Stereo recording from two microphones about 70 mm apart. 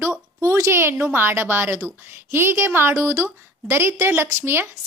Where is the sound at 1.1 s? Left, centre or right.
Right.